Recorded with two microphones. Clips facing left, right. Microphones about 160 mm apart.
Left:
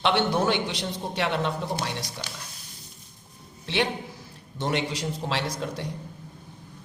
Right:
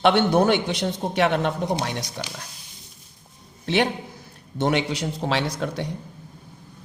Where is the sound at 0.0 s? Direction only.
55° right (ahead or behind).